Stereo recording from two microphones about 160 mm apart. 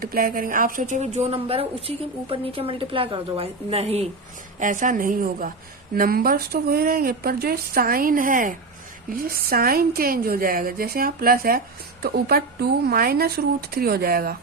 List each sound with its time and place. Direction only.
0.0 s a woman's voice: 65° right (ahead or behind); by 4.1 s 40° right (ahead or behind)
4.6 s a woman's voice: 55° right (ahead or behind)
9.0 s speech: 70° right (ahead or behind)